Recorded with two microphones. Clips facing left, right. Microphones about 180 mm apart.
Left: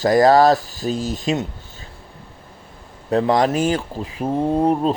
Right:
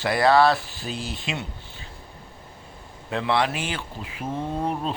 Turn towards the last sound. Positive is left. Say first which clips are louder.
# left 10 dB
turn(degrees=40)  # may be behind; listen again after turning